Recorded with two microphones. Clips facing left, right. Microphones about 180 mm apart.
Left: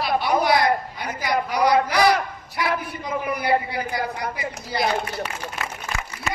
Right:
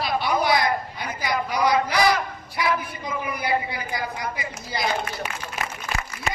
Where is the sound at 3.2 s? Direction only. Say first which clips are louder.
Left 4 dB; 60° left (ahead or behind).